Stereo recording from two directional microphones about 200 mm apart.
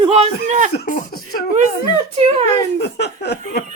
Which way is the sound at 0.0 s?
30° right (ahead or behind).